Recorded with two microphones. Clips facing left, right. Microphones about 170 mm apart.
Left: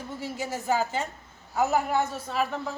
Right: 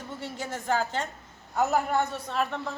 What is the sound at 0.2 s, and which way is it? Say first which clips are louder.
A woman's voice: left 3 dB; 5° left (ahead or behind).